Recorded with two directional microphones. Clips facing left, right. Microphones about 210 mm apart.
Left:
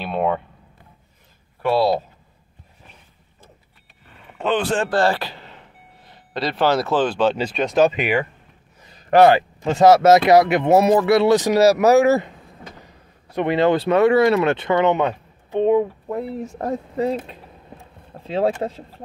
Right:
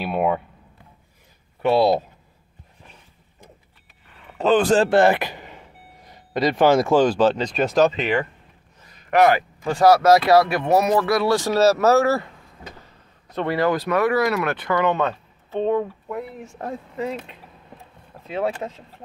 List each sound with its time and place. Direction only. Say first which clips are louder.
0.0 s speech: even; 5° right (ahead or behind)
1.6 s speech: right 1 dB; 20° right (ahead or behind)
4.4 s a man's voice: right 4 dB; 40° right (ahead or behind)
4.8 s speech: right 3 dB; 20° right (ahead or behind); by 7.8 s 5° right (ahead or behind)
7.8 s speech: left 3 dB; 10° left (ahead or behind)
8.9 s speech: left 4 dB; 30° left (ahead or behind)
13.3 s speech: left 4 dB; 20° left (ahead or behind)
16.1 s speech: left 5 dB; 35° left (ahead or behind)
18.2 s speech: left 5 dB; 30° left (ahead or behind)